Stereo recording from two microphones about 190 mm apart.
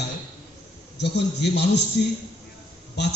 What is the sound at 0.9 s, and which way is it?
Speech, 65° left (ahead or behind).